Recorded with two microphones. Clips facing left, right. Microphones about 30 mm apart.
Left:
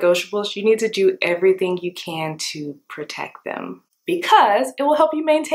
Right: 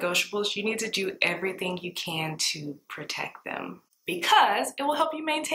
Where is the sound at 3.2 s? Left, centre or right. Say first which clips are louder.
Left 6 dB; centre.